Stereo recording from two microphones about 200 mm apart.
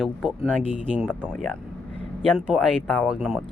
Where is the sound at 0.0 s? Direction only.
5° right (ahead or behind).